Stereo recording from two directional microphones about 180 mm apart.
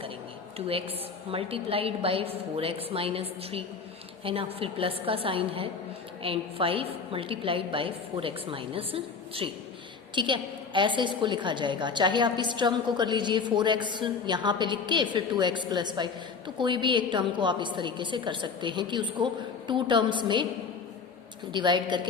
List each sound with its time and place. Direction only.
0.7 s a woman's voice: 30° right (ahead or behind)
21.5 s a woman's voice: 25° right (ahead or behind)